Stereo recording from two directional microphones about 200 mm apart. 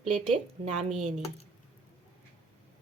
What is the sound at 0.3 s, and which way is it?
Speech, 35° right (ahead or behind).